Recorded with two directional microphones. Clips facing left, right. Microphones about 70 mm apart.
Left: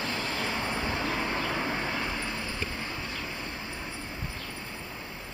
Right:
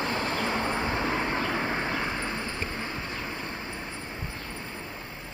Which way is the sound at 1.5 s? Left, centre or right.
Right.